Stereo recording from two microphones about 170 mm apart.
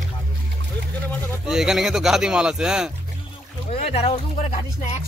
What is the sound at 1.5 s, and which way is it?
Speech, 5° right (ahead or behind).